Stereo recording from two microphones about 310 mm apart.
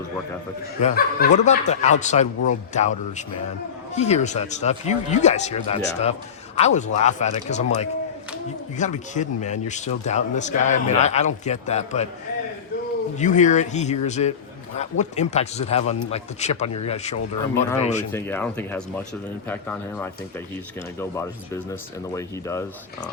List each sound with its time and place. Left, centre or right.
0.8 s speech: left
13.1 s speech: left
18.1 s speech: centre